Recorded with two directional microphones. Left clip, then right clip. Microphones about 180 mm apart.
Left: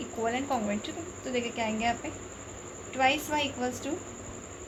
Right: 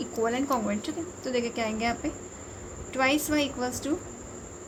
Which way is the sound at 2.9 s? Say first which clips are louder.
Right 1 dB; 80° right.